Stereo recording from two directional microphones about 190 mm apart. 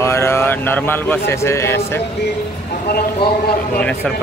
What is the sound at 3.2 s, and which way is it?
Speech, 55° left (ahead or behind).